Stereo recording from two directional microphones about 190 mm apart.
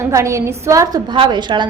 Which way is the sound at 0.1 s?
15° right (ahead or behind).